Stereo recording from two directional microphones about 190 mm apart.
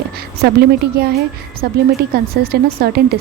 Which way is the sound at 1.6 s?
55° right (ahead or behind).